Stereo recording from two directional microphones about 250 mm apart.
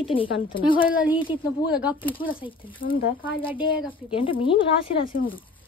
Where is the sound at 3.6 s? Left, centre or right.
Left.